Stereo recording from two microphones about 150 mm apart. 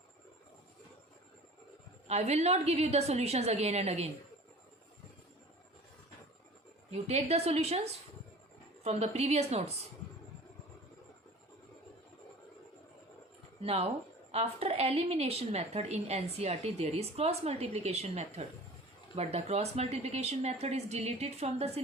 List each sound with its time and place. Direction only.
2.0 s a woman's voice: 45° right (ahead or behind)
6.9 s a woman's voice: 45° right (ahead or behind)
13.6 s a woman's voice: 40° right (ahead or behind)